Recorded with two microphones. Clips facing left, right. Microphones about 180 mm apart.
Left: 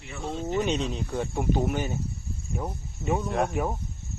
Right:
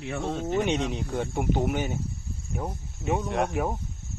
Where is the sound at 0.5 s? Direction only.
15° right (ahead or behind).